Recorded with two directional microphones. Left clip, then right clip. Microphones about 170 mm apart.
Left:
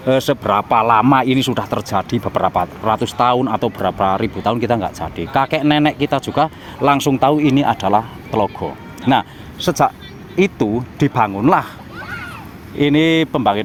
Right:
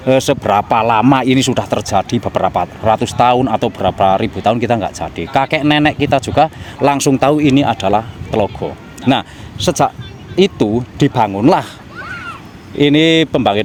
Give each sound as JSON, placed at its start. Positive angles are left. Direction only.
{"t": 0.0, "sound": "speech", "side_deg": -45}